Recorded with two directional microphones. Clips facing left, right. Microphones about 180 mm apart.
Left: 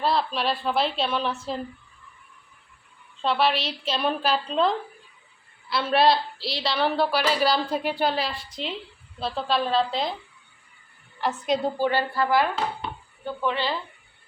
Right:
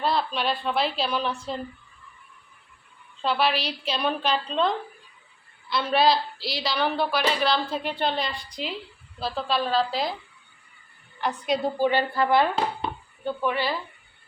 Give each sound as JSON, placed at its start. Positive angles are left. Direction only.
{"t": 0.0, "sound": "a woman's voice", "side_deg": 0}
{"t": 3.2, "sound": "a woman's voice", "side_deg": 0}
{"t": 11.2, "sound": "a woman's voice", "side_deg": 0}
{"t": 11.8, "sound": "a woman's voice", "side_deg": -20}
{"t": 13.2, "sound": "speech", "side_deg": -10}